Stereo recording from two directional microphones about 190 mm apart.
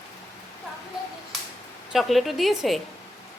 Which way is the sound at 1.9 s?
Centre (ahead or behind).